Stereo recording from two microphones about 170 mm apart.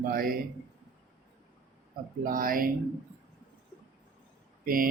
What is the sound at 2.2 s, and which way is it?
Speech, 55° right (ahead or behind).